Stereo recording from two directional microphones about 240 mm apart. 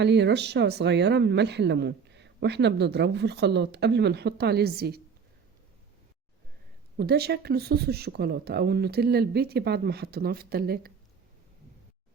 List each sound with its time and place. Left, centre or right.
0.0 s speech: right
6.9 s speech: right